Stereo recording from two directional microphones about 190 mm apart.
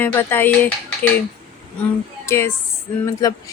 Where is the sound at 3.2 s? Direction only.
15° left (ahead or behind).